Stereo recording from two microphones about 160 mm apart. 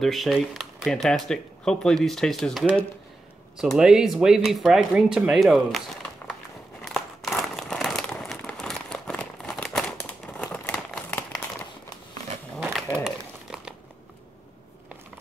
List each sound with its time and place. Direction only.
0.0 s speech: centre (ahead or behind)
6.9 s crumpling: centre (ahead or behind)
12.5 s a sound: centre (ahead or behind)